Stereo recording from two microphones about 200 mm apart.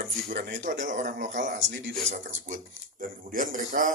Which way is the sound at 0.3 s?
40° right (ahead or behind).